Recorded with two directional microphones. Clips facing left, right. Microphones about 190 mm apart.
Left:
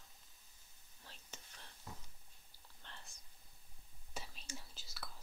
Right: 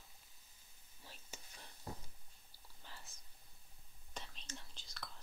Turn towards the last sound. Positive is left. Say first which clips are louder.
# even
turn(degrees=5)  # may be behind; listen again after turning